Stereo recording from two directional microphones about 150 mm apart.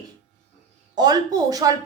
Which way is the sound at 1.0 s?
25° right (ahead or behind).